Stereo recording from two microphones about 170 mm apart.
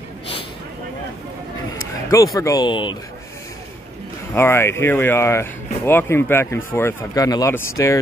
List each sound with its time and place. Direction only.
2.0 s speech: 20° left (ahead or behind)
4.3 s speech: 15° left (ahead or behind)